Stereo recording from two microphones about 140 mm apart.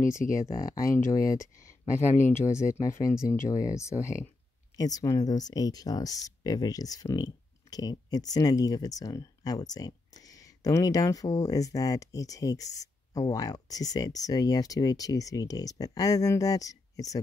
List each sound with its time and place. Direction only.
0.4 s speech: 25° left (ahead or behind)